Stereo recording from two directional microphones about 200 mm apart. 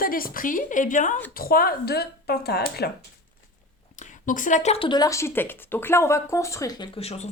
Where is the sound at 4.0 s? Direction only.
40° left (ahead or behind).